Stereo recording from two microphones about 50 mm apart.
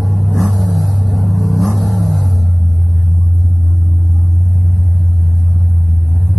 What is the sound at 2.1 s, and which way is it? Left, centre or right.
Music, centre.